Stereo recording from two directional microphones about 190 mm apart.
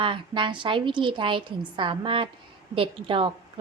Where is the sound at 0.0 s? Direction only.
25° right (ahead or behind).